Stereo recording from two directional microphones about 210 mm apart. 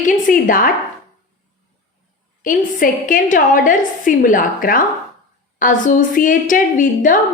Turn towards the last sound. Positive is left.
turn(degrees=40)  # may be behind; listen again after turning